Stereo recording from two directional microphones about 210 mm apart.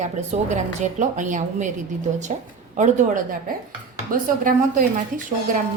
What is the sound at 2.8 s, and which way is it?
A woman's voice, 35° right (ahead or behind).